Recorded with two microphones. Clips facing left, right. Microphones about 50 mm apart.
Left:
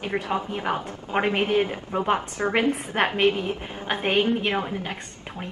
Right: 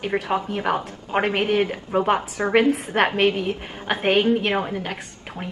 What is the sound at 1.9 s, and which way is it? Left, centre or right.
Speech, centre.